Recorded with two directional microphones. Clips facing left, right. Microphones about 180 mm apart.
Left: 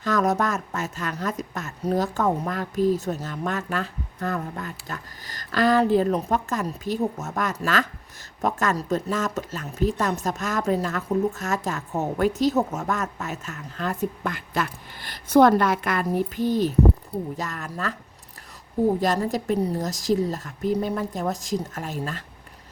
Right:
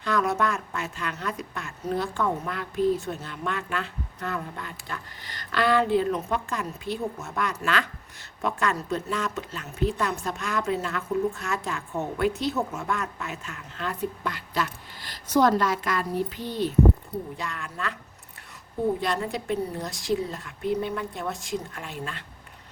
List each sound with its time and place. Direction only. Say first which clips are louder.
0.0 s a woman's voice: left 3 dB; 40° left (ahead or behind)
18.9 s speech: left 5 dB; 40° left (ahead or behind)